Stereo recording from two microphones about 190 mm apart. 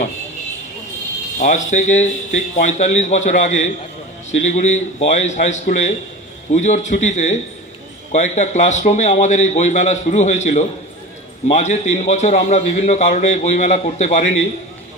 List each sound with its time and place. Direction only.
1.4 s a man's voice: 40° left (ahead or behind)